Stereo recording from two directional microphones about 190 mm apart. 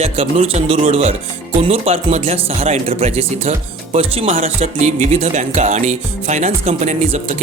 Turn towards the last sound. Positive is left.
turn(degrees=-40)  # may be behind; listen again after turning